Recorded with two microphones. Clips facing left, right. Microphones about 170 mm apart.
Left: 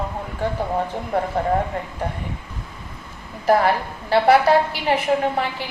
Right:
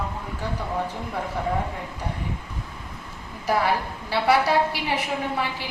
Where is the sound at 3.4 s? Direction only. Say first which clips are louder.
Left 6 dB; 60° left (ahead or behind).